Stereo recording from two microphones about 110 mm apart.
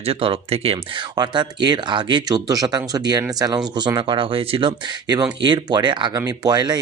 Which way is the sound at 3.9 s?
50° right (ahead or behind).